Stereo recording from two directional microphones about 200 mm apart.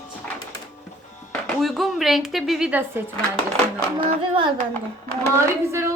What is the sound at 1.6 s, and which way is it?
A woman's voice, centre (ahead or behind).